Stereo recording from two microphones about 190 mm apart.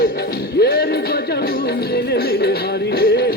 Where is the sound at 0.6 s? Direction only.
50° left (ahead or behind).